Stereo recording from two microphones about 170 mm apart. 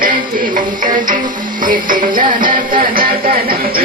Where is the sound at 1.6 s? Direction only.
50° right (ahead or behind).